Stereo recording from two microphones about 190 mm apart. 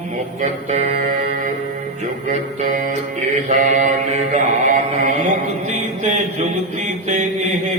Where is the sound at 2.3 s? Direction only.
45° right (ahead or behind).